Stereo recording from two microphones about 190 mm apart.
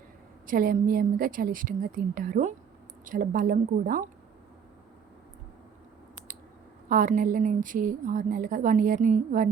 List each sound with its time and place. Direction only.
0.4 s a woman's voice: 45° right (ahead or behind)
6.8 s a woman's voice: 45° right (ahead or behind)